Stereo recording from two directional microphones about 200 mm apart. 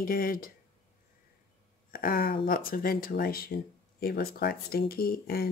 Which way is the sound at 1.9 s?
45° left (ahead or behind).